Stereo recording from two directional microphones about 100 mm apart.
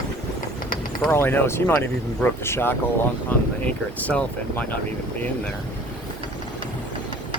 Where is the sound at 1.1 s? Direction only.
20° left (ahead or behind).